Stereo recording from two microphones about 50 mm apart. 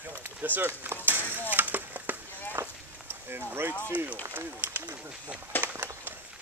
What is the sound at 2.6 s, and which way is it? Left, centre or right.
Run, right.